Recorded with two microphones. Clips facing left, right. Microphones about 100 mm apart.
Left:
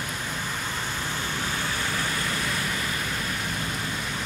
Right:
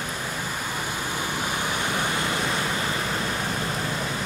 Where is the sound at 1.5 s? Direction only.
15° right (ahead or behind).